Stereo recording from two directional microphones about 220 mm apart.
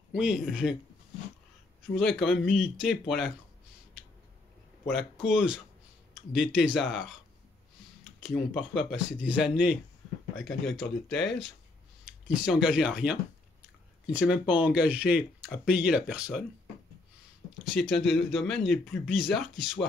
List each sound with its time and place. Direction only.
0.1 s speech: 5° right (ahead or behind)
2.0 s speech: centre (ahead or behind)
4.8 s speech: 5° right (ahead or behind)
8.5 s speech: 5° right (ahead or behind)
17.7 s speech: centre (ahead or behind)